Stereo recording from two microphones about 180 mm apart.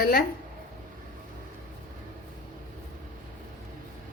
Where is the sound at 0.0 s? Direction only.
55° left (ahead or behind).